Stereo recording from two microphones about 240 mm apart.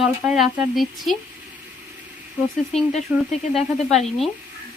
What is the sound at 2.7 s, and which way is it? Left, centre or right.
Speech, left.